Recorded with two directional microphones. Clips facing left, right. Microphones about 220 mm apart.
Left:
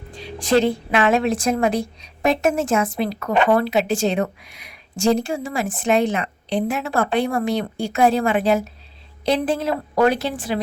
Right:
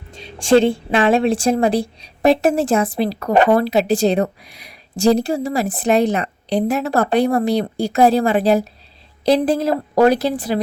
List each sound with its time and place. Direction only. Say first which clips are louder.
0.1 s a woman's voice: right 5 dB; 25° right (ahead or behind)